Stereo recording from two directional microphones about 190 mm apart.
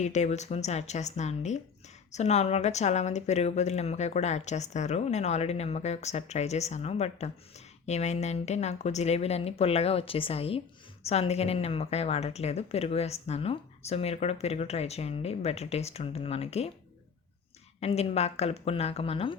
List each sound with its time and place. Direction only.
0.0 s a woman's voice: 35° left (ahead or behind)
17.7 s a woman's voice: 35° left (ahead or behind)